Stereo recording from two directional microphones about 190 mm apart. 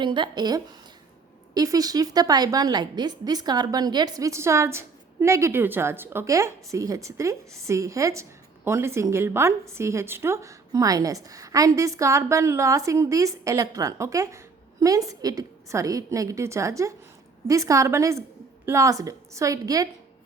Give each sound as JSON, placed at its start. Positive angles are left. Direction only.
{"t": 0.0, "sound": "a woman's voice", "side_deg": -25}